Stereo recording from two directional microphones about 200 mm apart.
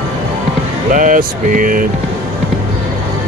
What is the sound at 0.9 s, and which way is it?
Speech, 40° right (ahead or behind).